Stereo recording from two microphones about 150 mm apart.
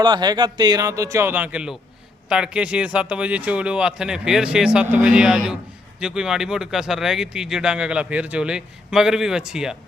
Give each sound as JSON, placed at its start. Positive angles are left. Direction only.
{"t": 0.0, "sound": "speech", "side_deg": -30}